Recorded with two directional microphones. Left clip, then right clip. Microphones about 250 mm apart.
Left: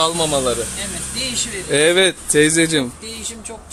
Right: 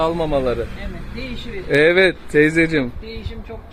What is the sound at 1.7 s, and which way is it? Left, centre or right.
Speech, centre.